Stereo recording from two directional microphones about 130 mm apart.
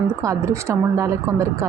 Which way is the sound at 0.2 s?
25° right (ahead or behind).